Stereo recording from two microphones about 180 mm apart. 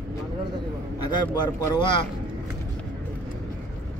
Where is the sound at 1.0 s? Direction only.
20° left (ahead or behind).